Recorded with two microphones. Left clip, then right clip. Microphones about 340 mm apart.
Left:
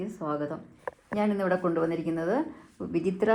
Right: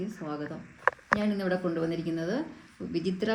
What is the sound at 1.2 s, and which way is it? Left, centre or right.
A woman's voice, centre.